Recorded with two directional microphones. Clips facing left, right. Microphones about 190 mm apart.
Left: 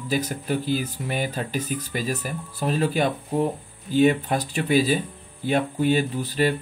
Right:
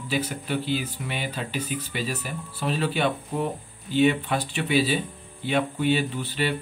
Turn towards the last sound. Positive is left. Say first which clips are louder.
# left 4 dB
turn(degrees=40)  # may be behind; listen again after turning